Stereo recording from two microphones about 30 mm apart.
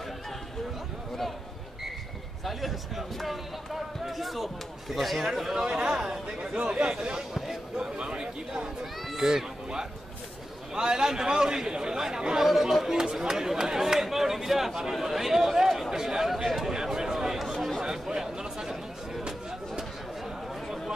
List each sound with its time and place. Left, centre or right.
2.4 s speech: centre
5.9 s speech: right
6.6 s speech: right
7.2 s speech: centre
7.8 s speech: right
10.7 s speech: right
16.4 s speech: centre
16.7 s a sound: centre
17.8 s a sound: centre